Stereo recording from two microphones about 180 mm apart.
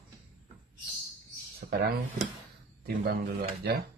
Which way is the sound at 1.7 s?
55° right (ahead or behind).